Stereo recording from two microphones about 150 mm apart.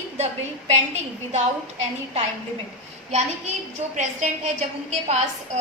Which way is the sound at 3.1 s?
50° right (ahead or behind).